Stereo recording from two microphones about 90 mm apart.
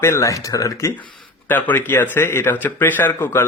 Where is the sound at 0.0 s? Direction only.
35° left (ahead or behind).